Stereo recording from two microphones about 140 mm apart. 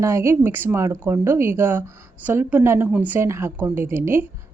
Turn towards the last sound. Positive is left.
turn(degrees=-15)  # may be behind; listen again after turning